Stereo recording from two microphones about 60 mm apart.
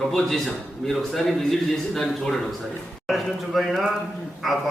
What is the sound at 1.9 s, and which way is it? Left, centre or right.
Speech, centre.